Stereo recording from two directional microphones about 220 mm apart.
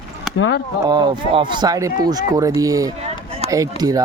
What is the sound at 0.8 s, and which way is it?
Speech, 20° right (ahead or behind).